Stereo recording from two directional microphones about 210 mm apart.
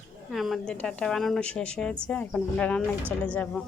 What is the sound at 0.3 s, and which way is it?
A woman's voice, centre (ahead or behind).